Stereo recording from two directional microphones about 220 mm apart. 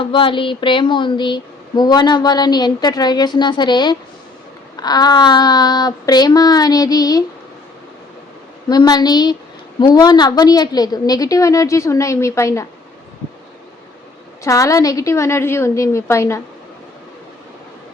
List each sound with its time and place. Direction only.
0.0 s a woman's voice: 25° left (ahead or behind)
8.7 s a woman's voice: 20° left (ahead or behind)
14.4 s a woman's voice: 15° left (ahead or behind)